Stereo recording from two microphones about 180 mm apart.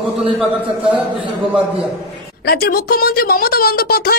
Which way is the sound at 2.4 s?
55° left (ahead or behind).